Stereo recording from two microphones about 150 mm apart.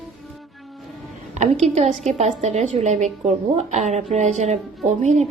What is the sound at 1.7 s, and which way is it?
A woman's voice, 45° right (ahead or behind).